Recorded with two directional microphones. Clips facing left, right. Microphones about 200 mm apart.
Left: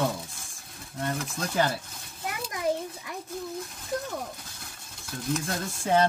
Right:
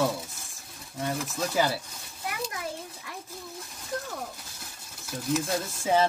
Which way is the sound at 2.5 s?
20° left (ahead or behind).